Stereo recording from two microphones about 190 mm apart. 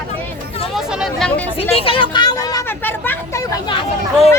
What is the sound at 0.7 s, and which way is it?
Speech, centre (ahead or behind).